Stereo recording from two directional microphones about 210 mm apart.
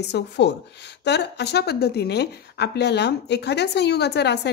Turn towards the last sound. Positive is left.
turn(degrees=55)  # may be behind; listen again after turning